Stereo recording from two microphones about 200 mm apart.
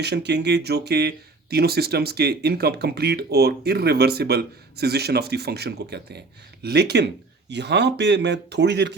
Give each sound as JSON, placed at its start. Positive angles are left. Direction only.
{"t": 0.0, "sound": "speech", "side_deg": -55}